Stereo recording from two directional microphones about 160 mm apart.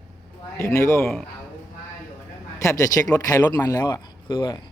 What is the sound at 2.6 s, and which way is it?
Speech, 20° left (ahead or behind).